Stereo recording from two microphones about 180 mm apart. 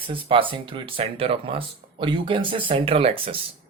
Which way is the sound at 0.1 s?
30° right (ahead or behind).